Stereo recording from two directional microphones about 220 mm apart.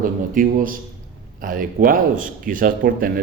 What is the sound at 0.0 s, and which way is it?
Speech, 40° right (ahead or behind).